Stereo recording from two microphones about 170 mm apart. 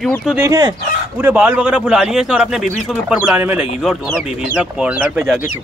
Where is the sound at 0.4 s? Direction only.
20° right (ahead or behind).